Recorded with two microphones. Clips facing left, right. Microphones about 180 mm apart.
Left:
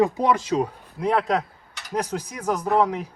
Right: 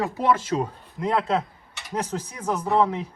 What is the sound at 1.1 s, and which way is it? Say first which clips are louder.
Speech: even; centre (ahead or behind).